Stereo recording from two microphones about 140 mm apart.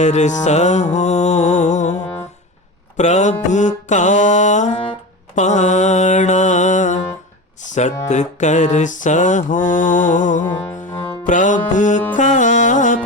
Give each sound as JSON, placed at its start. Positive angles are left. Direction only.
{"t": 0.0, "sound": "mantra", "side_deg": 55}
{"t": 3.0, "sound": "mantra", "side_deg": 55}
{"t": 5.3, "sound": "music", "side_deg": 55}
{"t": 7.6, "sound": "a sound", "side_deg": 55}
{"t": 8.0, "sound": "mantra", "side_deg": 60}
{"t": 12.1, "sound": "music", "side_deg": 60}